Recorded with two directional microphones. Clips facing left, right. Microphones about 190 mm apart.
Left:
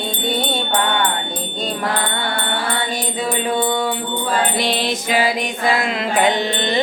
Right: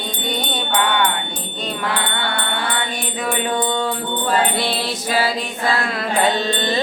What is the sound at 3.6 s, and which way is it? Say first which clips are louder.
Music: left 1 dB; 10° left (ahead or behind).